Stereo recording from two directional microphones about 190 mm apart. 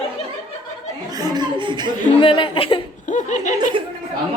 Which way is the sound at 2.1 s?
25° left (ahead or behind).